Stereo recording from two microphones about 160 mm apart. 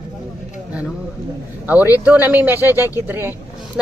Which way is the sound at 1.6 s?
10° right (ahead or behind).